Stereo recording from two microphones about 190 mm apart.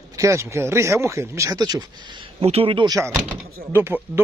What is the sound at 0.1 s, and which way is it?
Speech, 15° right (ahead or behind).